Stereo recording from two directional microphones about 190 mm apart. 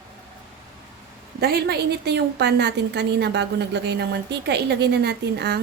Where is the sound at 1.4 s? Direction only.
55° right (ahead or behind).